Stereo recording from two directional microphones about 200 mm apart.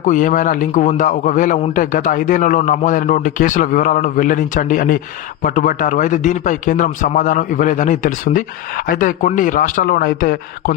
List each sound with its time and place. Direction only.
0.0 s a man's voice: 40° left (ahead or behind)